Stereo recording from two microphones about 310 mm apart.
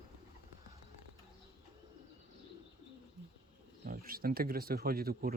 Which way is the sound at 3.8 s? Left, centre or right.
Right.